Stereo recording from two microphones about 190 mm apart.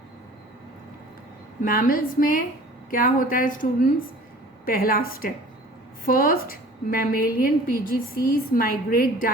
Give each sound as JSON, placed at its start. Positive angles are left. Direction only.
{"t": 1.6, "sound": "a woman's voice", "side_deg": 50}